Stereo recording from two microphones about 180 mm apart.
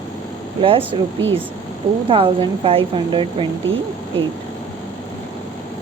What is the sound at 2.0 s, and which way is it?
Speech, 30° right (ahead or behind).